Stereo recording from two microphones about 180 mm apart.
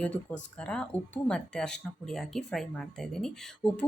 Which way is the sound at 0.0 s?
5° left (ahead or behind).